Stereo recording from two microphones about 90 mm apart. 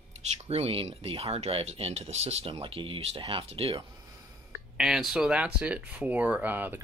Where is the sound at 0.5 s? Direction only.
90° right.